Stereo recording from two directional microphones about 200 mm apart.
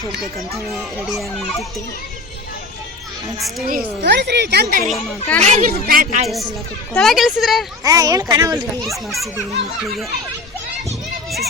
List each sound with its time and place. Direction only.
1.0 s a woman's voice: centre (ahead or behind)
4.0 s a woman's voice: 60° right (ahead or behind)
5.4 s speech: 35° right (ahead or behind)
6.9 s a woman's voice: centre (ahead or behind)
7.9 s speech: 15° right (ahead or behind)